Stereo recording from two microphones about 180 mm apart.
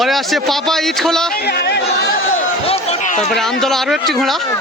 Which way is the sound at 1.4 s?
65° left (ahead or behind).